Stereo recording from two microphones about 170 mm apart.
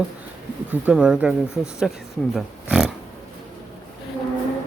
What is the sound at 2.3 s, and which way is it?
Pig, 5° right (ahead or behind).